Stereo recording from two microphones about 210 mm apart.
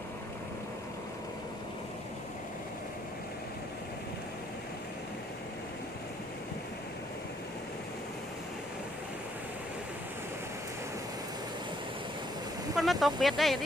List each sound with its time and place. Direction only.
12.7 s speech: centre (ahead or behind)